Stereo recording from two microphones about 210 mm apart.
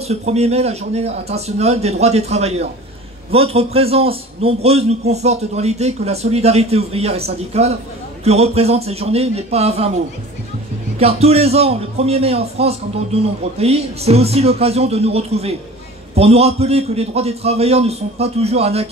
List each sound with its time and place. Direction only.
0.1 s a man's voice: 30° right (ahead or behind)
11.0 s a man's voice: 30° right (ahead or behind)